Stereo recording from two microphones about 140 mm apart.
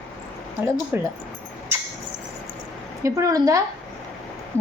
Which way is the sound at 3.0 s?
25° right (ahead or behind).